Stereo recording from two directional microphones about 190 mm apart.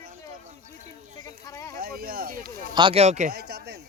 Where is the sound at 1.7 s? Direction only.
50° right (ahead or behind).